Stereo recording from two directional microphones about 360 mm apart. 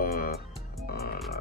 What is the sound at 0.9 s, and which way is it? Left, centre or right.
Music, left.